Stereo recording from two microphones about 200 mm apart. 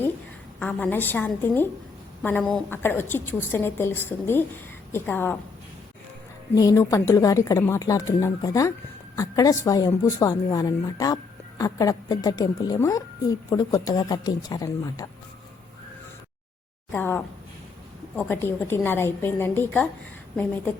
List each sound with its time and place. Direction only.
0.6 s a woman's voice: 5° left (ahead or behind)
6.6 s a woman's voice: 15° left (ahead or behind)
16.9 s a woman's voice: 10° left (ahead or behind)